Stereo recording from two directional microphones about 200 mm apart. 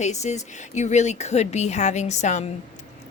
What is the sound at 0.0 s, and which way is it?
A woman's voice, 35° left (ahead or behind).